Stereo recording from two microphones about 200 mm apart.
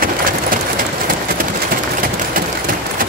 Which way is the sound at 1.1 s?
45° right (ahead or behind).